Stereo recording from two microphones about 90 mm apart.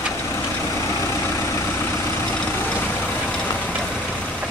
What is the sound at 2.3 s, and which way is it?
Vehicle, 15° left (ahead or behind).